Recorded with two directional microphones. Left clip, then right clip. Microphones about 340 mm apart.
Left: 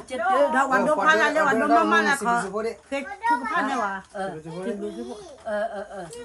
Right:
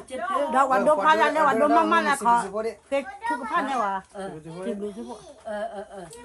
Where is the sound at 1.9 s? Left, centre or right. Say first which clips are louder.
Even; centre.